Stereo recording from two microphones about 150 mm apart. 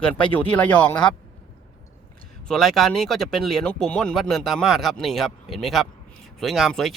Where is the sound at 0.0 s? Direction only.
10° left (ahead or behind).